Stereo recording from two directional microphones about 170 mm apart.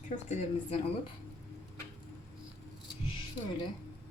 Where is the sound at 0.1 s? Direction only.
40° left (ahead or behind).